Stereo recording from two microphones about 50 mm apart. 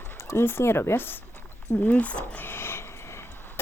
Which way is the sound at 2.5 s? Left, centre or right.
Left.